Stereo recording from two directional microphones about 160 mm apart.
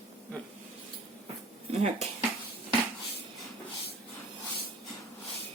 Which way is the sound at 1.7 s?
40° right (ahead or behind).